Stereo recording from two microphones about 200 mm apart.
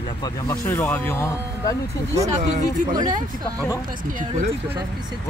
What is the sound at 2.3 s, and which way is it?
Speech, 35° right (ahead or behind).